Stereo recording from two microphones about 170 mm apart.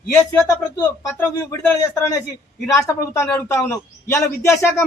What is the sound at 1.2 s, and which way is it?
A man's voice, 15° left (ahead or behind).